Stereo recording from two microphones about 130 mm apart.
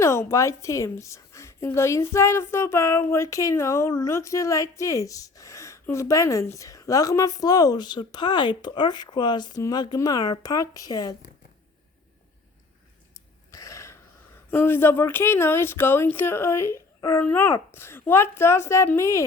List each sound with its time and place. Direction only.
0.0 s a woman's voice: 20° left (ahead or behind)
13.1 s a sound: 25° left (ahead or behind)
14.5 s a woman's voice: 15° left (ahead or behind)